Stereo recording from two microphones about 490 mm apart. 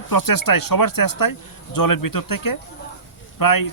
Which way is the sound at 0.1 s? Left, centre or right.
Left.